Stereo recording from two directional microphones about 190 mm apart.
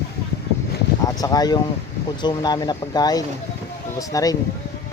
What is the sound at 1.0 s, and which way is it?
Speech, 20° left (ahead or behind).